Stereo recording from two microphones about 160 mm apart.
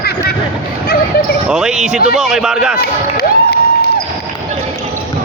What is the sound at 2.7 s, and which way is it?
Basketball bounce, 85° left.